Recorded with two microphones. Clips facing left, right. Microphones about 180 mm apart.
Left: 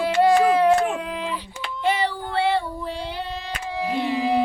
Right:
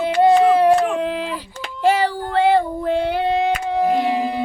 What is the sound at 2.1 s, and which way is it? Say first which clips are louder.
Female singing: right 6 dB; 40° right (ahead or behind).